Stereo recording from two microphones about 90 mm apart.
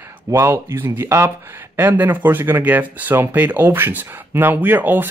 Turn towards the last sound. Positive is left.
turn(degrees=-20)  # may be behind; listen again after turning